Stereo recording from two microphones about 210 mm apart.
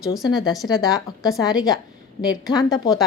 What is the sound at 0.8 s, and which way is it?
A woman's voice, 15° left (ahead or behind).